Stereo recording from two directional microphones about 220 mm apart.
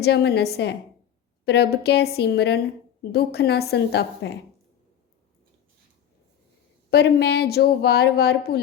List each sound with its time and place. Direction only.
0.0 s speech: 50° left (ahead or behind)
6.9 s speech: 50° left (ahead or behind)